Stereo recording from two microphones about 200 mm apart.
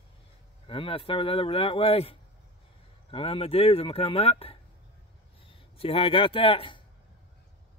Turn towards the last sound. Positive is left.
turn(degrees=25)  # may be behind; listen again after turning